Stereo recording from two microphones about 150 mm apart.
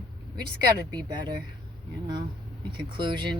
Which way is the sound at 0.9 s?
25° right (ahead or behind).